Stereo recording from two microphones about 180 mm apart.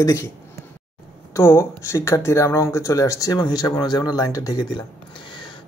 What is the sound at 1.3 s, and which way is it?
Speech, 15° left (ahead or behind).